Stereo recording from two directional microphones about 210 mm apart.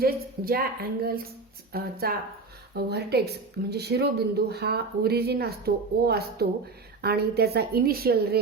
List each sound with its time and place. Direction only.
0.0 s speech: 45° right (ahead or behind)